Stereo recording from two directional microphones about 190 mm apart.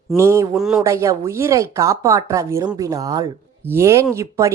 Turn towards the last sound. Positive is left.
turn(degrees=-15)  # may be behind; listen again after turning